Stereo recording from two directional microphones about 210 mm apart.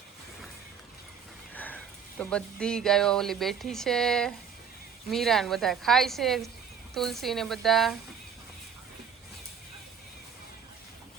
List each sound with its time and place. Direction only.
1.5 s a woman's voice: 5° left (ahead or behind)